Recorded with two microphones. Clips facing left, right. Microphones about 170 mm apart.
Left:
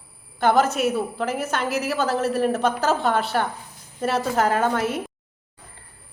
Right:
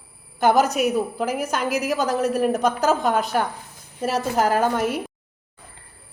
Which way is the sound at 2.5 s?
40° right (ahead or behind).